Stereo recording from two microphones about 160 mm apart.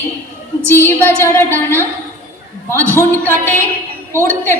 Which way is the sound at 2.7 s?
15° left (ahead or behind).